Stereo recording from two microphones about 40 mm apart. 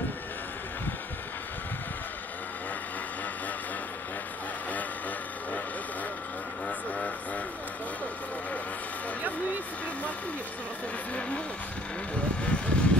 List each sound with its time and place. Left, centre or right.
12.4 s vehicle: left